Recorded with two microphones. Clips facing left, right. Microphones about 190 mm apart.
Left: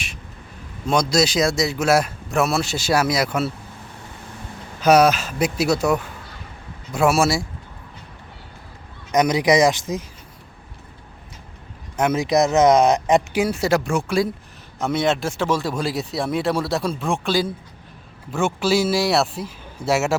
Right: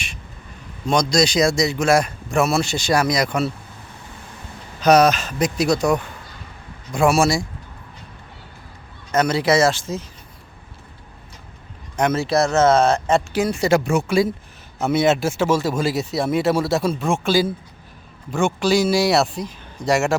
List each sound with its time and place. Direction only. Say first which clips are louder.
0.9 s speech: right 1 dB; 5° left (ahead or behind)
4.8 s speech: even; 10° left (ahead or behind)
9.1 s speech: left 1 dB; 15° left (ahead or behind)
11.9 s speech: even; 10° left (ahead or behind)